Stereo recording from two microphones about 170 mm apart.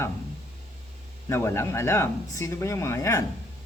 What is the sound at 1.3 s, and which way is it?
Speech, 15° left (ahead or behind).